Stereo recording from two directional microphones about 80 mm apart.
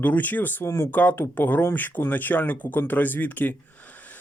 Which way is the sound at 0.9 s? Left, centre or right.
Left.